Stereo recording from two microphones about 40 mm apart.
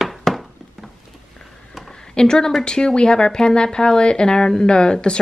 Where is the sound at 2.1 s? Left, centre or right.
Centre.